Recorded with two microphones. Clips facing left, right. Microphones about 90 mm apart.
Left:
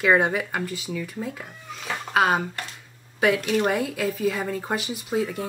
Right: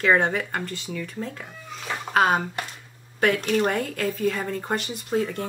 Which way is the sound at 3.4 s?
5° left (ahead or behind).